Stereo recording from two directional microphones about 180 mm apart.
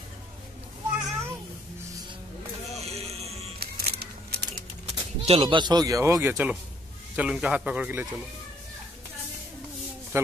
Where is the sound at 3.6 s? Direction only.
60° right (ahead or behind).